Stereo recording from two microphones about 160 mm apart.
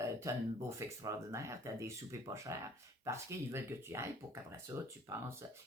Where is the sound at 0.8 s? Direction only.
20° right (ahead or behind).